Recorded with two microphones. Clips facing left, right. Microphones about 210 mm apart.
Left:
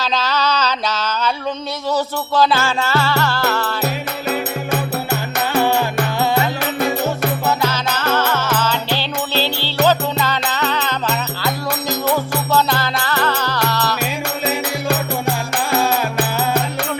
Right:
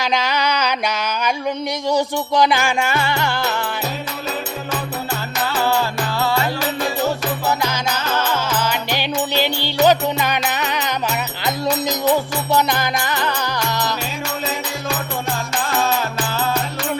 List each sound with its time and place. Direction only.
0.0 s music: 15° right (ahead or behind)
6.6 s music: 60° left (ahead or behind)
8.1 s music: 10° right (ahead or behind)